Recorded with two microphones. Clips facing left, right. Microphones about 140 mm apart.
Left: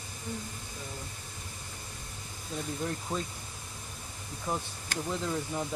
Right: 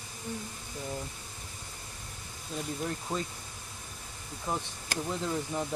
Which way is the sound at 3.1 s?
20° right (ahead or behind).